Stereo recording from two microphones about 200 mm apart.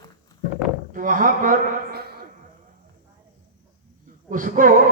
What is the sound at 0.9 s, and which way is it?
A man's voice, 40° right (ahead or behind).